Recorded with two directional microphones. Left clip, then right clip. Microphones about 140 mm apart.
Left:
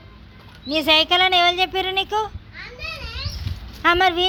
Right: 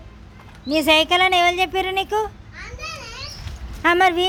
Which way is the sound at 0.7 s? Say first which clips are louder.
Right 1 dB; 25° right (ahead or behind).